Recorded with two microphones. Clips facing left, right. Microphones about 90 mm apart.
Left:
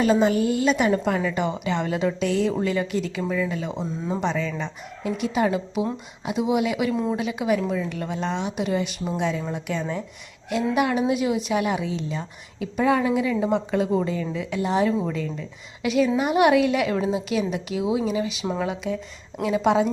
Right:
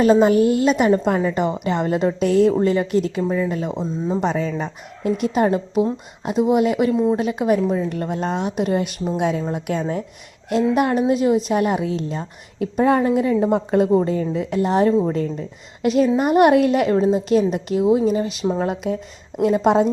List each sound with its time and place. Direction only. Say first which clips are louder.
0.0 s a woman's voice: right 6 dB; 45° right (ahead or behind)
0.9 s a woman's voice: right 5 dB; 35° right (ahead or behind)
3.7 s speech: right 5 dB; centre (ahead or behind)
4.2 s a woman's voice: right 4 dB; 40° right (ahead or behind)
6.9 s a woman's voice: right 6 dB; 20° right (ahead or behind)
7.2 s a woman's voice: right 5 dB; 45° right (ahead or behind)